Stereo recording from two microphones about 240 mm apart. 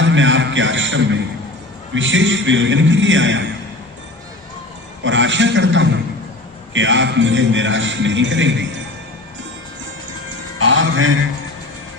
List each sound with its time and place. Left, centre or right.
0.0 s a man's voice: right
5.0 s a man's voice: right
10.6 s music: right